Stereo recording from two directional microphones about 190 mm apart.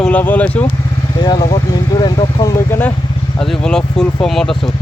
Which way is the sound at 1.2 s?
20° left (ahead or behind).